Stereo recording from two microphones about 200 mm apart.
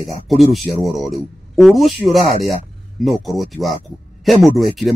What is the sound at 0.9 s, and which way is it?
Speech, centre (ahead or behind).